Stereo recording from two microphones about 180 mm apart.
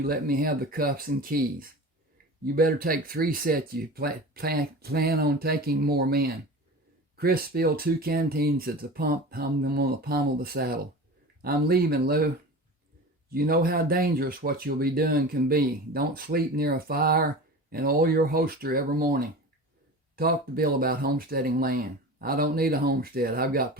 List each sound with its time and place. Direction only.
0.0 s speech: 55° right (ahead or behind)
13.3 s speech: 55° right (ahead or behind)